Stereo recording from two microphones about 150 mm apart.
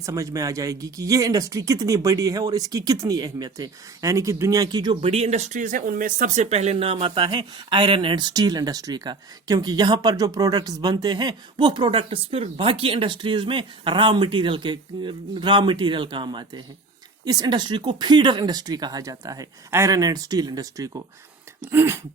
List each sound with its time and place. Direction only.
0.0 s speech: 20° right (ahead or behind)
4.9 s speech: 40° right (ahead or behind); by 21.0 s 25° right (ahead or behind)
21.6 s a sound: 15° right (ahead or behind)